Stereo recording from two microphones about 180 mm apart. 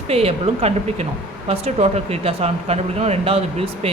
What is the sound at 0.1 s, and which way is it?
Speech, 35° right (ahead or behind).